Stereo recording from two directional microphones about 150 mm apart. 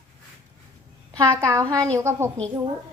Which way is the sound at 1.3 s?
20° right (ahead or behind).